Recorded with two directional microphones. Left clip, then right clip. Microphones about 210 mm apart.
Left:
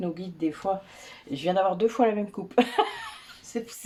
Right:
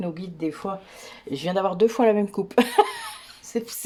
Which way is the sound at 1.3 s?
45° right (ahead or behind).